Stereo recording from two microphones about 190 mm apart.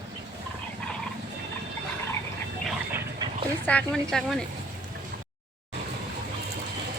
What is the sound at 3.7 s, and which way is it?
Speech, 5° left (ahead or behind).